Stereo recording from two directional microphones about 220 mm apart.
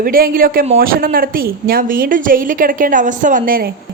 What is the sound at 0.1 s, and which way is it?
A woman's voice, 40° right (ahead or behind).